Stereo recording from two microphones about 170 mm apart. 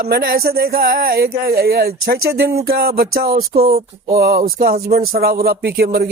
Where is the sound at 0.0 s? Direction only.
65° right (ahead or behind).